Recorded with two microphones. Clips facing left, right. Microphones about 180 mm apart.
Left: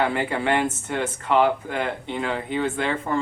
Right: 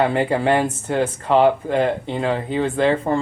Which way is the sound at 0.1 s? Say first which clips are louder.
Right 5 dB; 30° right (ahead or behind).